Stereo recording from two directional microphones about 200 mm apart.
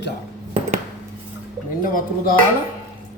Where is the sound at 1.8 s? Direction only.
45° left (ahead or behind).